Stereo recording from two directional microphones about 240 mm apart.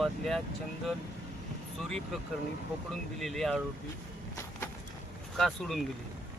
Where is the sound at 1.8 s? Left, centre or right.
Centre.